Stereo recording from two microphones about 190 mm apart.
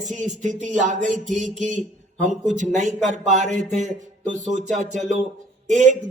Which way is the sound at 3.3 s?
40° right (ahead or behind).